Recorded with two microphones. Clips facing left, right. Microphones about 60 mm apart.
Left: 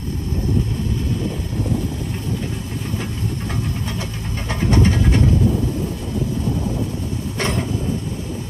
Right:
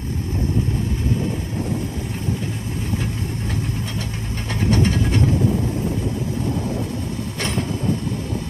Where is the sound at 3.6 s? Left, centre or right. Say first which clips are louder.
Left 1 dB; right.